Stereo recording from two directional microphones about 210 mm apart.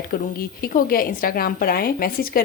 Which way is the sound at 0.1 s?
45° left (ahead or behind).